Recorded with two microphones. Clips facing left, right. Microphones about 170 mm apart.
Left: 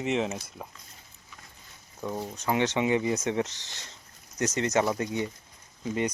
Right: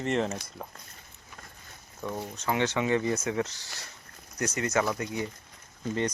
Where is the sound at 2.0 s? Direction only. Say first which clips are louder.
Left 1 dB; 10° left (ahead or behind).